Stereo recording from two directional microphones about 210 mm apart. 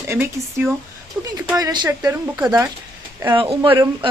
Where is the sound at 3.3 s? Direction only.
25° right (ahead or behind).